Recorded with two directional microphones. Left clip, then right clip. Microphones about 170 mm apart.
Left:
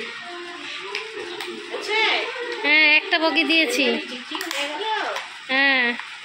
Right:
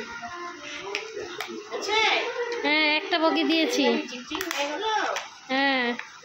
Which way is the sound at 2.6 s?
15° right (ahead or behind).